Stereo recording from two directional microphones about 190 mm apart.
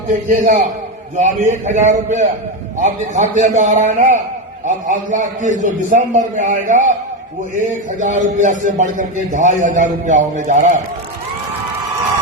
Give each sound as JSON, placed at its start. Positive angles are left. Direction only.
{"t": 0.3, "sound": "a man's voice", "side_deg": -50}